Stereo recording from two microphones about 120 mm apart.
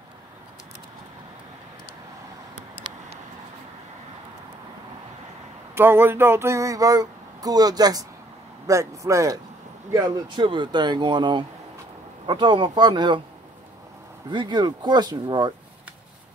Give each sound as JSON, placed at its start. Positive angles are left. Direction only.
{"t": 5.8, "sound": "speech", "side_deg": -20}
{"t": 9.9, "sound": "speech", "side_deg": -40}
{"t": 14.3, "sound": "speech", "side_deg": -40}